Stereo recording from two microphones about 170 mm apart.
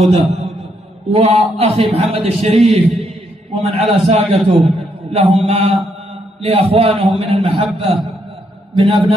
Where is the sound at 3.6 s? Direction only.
40° right (ahead or behind).